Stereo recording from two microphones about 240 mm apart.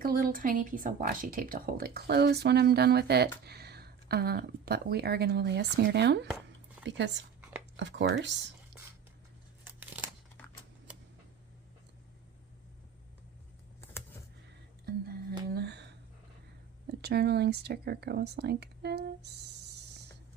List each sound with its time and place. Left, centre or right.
0.0 s speech: right
14.8 s music: right
16.8 s speech: right